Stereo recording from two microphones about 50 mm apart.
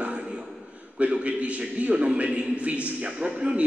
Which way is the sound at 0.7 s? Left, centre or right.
Right.